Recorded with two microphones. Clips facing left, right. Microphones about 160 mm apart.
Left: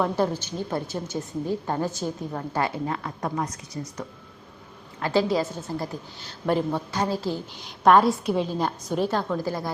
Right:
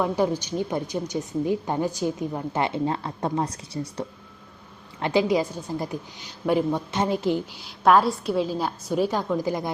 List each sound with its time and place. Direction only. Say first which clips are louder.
0.0 s a woman's voice: right 1 dB; 15° right (ahead or behind); by 4.0 s 30° right (ahead or behind)
4.9 s a woman's voice: right 1 dB; 20° right (ahead or behind)
7.6 s a woman's voice: left 2 dB; centre (ahead or behind); by 9.7 s 20° right (ahead or behind)